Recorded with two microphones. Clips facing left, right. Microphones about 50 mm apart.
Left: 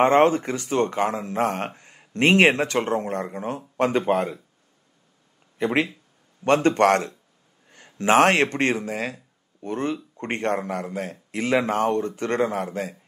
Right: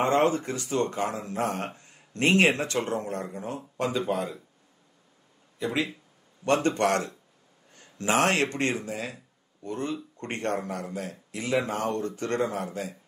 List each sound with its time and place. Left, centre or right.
0.0 s speech: left
5.6 s speech: left